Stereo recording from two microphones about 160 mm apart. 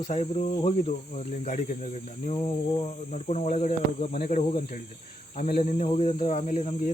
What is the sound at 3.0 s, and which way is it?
Speech, 45° left (ahead or behind).